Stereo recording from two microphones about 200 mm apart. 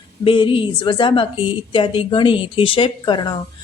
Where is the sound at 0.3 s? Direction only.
25° left (ahead or behind).